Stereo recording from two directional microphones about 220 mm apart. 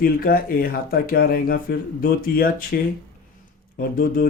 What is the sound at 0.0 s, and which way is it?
Speech, 40° left (ahead or behind).